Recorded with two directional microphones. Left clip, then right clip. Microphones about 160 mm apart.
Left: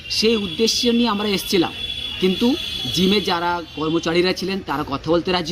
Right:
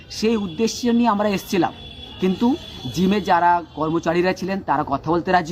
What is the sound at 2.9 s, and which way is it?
Speech, 15° right (ahead or behind).